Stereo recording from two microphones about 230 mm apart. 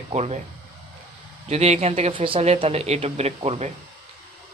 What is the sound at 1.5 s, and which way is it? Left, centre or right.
Speech, right.